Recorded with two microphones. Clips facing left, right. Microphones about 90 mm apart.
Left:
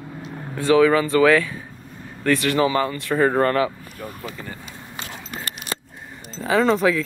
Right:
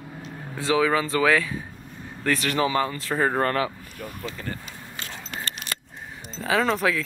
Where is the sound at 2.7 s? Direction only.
5° right (ahead or behind).